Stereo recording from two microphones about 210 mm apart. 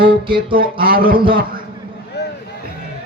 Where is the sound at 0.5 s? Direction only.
45° right (ahead or behind).